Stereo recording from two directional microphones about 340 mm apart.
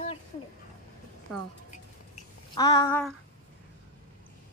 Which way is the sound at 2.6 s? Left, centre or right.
Centre.